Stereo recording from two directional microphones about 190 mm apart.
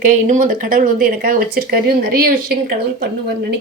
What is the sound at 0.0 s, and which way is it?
Speech, 40° right (ahead or behind).